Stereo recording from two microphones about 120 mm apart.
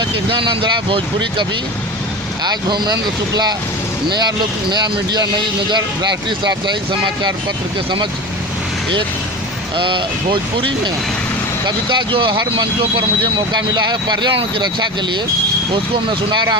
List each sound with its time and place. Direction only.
0.3 s speech: 45° right (ahead or behind)
9.7 s speech: 45° right (ahead or behind)